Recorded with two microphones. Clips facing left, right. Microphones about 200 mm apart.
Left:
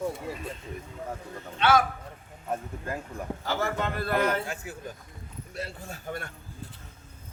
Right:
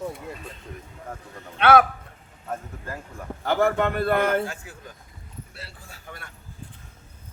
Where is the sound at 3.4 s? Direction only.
55° right (ahead or behind).